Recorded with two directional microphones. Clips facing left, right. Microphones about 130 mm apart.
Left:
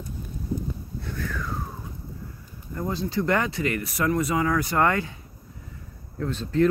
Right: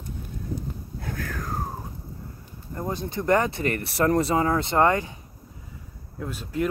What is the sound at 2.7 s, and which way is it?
Speech, 25° right (ahead or behind).